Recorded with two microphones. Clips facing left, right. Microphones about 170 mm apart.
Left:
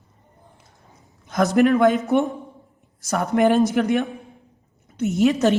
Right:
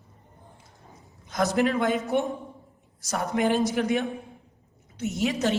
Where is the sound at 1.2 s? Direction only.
60° left (ahead or behind).